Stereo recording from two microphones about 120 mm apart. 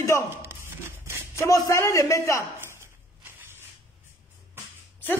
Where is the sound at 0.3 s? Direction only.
20° right (ahead or behind).